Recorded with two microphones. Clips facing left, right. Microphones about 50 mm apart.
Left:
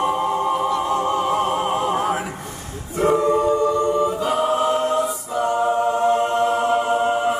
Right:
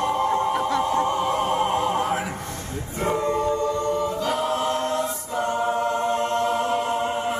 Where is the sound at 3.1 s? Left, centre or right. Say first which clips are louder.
Left 5 dB; centre.